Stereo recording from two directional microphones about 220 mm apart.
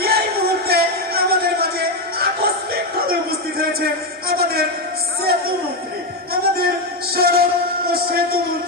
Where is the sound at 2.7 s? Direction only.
45° right (ahead or behind).